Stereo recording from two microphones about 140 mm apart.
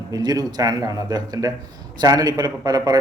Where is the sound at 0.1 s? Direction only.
30° right (ahead or behind).